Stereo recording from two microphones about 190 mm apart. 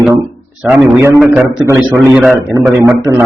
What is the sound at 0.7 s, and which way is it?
Speech, 15° right (ahead or behind).